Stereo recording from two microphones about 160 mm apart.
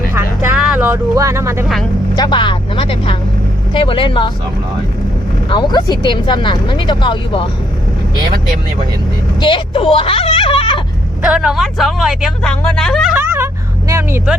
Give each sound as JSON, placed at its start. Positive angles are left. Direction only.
{"t": 0.5, "sound": "a sound", "side_deg": -5}
{"t": 0.9, "sound": "speech", "side_deg": -20}
{"t": 1.6, "sound": "speech", "side_deg": 0}
{"t": 2.1, "sound": "speech", "side_deg": 30}
{"t": 5.5, "sound": "speech", "side_deg": 30}
{"t": 9.4, "sound": "speech", "side_deg": 30}
{"t": 11.2, "sound": "speech", "side_deg": -5}
{"t": 13.1, "sound": "speech", "side_deg": -15}